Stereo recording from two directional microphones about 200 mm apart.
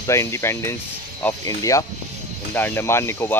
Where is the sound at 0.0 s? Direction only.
15° left (ahead or behind).